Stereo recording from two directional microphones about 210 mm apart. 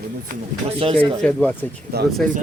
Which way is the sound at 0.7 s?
25° right (ahead or behind).